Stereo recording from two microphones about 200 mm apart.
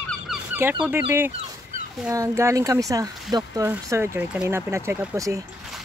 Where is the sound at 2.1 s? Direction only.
15° right (ahead or behind).